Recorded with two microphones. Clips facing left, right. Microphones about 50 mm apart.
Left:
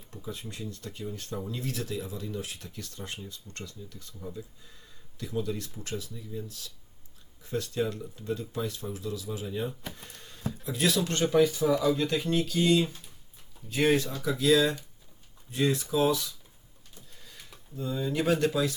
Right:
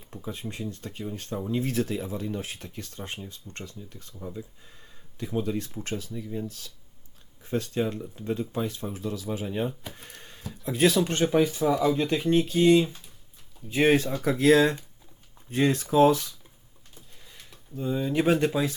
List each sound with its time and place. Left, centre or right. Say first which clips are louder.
0.1 s speech: right 4 dB; right
5.1 s speech: right 4 dB; right
9.9 s a sound: right 2 dB; right
10.6 s speech: right 6 dB; right
11.0 s speech: right 1 dB; right
13.7 s speech: right 3 dB; right
17.7 s speech: right 4 dB; right